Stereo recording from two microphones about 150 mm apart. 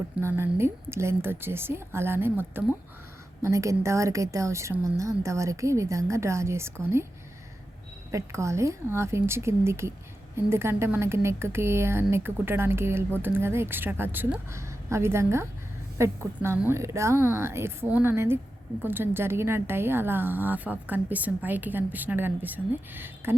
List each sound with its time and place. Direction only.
0.2 s a woman's voice: 15° right (ahead or behind)
8.1 s a woman's voice: 20° right (ahead or behind)